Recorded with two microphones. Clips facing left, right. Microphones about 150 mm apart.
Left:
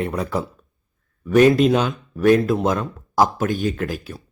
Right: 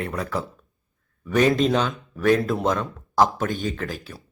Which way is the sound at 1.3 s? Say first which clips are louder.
Left 5 dB; 5° left (ahead or behind).